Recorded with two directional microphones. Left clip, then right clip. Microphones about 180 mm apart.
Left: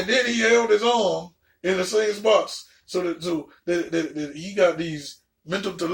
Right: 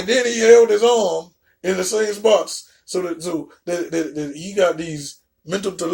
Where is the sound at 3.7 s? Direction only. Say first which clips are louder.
Right 2 dB; 60° right (ahead or behind).